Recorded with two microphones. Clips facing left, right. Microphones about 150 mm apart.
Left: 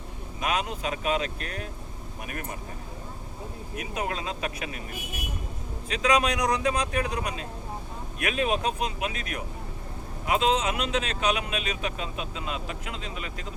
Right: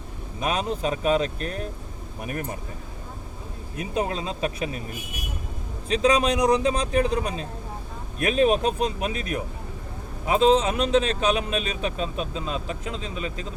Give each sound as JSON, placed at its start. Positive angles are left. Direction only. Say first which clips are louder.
{"t": 0.3, "sound": "a man's voice", "louder": "right 3 dB", "side_deg": -35}
{"t": 3.8, "sound": "a man's voice", "louder": "right 5 dB", "side_deg": -25}
{"t": 5.9, "sound": "a man's voice", "louder": "right 4 dB", "side_deg": -30}